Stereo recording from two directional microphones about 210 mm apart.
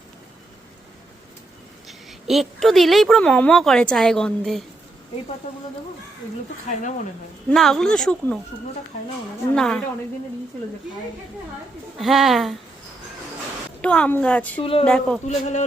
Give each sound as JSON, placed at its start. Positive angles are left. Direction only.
{"t": 1.9, "sound": "a woman's voice", "side_deg": 0}
{"t": 7.5, "sound": "a woman's voice", "side_deg": 0}
{"t": 9.6, "sound": "a woman's voice", "side_deg": 0}
{"t": 11.9, "sound": "a woman's voice", "side_deg": 0}
{"t": 13.8, "sound": "a woman's voice", "side_deg": 5}
{"t": 14.6, "sound": "speech", "side_deg": 25}
{"t": 14.8, "sound": "a woman's voice", "side_deg": 5}
{"t": 15.3, "sound": "speech", "side_deg": 35}